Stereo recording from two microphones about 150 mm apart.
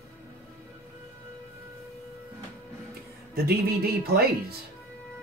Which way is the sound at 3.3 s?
90° right.